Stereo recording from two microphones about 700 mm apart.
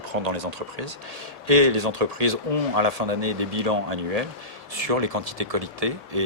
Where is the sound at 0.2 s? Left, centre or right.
Right.